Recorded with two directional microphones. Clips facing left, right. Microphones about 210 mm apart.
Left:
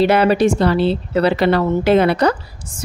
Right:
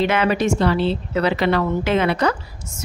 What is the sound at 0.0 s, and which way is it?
A woman's voice, 35° left (ahead or behind).